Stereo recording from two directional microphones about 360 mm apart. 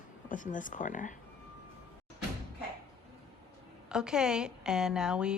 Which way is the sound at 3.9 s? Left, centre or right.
Centre.